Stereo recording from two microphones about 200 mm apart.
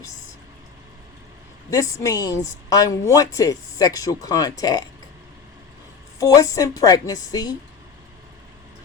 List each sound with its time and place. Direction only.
1.7 s a woman's voice: 15° left (ahead or behind)
6.1 s a woman's voice: 15° left (ahead or behind)